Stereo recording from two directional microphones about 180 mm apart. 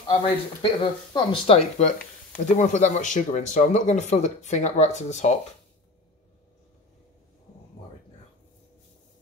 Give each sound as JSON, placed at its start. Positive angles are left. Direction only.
{"t": 0.6, "sound": "speech", "side_deg": 25}